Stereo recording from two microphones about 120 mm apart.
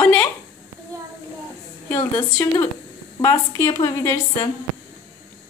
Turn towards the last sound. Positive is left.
turn(degrees=30)  # may be behind; listen again after turning